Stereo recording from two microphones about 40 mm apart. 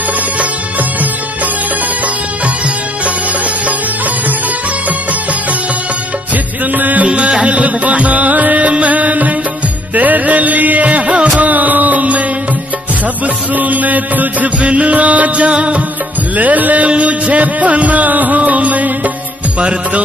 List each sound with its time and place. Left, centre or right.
6.3 s music: right
7.1 s music: right
13.6 s mantra: right
14.6 s music: right
16.3 s music: right